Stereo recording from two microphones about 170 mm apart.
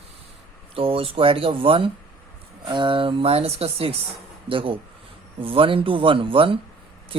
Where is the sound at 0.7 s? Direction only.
35° right (ahead or behind).